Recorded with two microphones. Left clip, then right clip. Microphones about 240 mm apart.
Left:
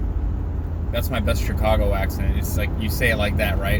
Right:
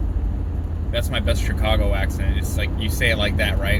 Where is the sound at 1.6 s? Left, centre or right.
Centre.